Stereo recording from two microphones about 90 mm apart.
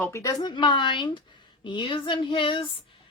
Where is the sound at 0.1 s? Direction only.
40° left (ahead or behind).